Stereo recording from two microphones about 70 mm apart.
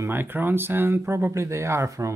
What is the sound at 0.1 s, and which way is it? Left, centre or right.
Speech, right.